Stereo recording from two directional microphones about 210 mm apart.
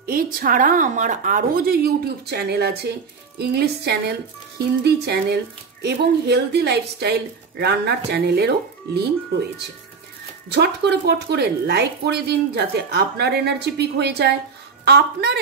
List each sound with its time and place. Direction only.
0.0 s speech: 40° right (ahead or behind)
10.5 s speech: 55° right (ahead or behind)